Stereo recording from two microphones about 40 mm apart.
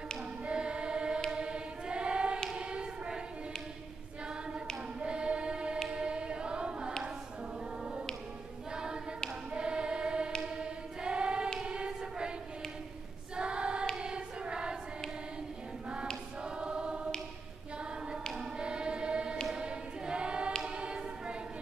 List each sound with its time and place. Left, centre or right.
0.5 s choir: right
2.5 s a sound: right
5.0 s choir: right
5.9 s chant: right
8.7 s choir: centre
13.4 s choir: right
16.4 s choir: right
18.6 s choir: right
20.7 s a sound: right